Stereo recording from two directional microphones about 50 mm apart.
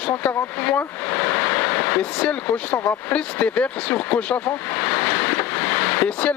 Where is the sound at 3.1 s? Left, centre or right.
Left.